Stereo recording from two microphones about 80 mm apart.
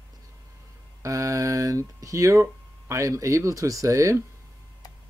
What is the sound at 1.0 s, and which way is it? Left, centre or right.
Speech, right.